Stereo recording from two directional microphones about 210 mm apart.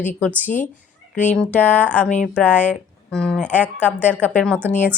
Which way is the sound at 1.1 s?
35° left (ahead or behind).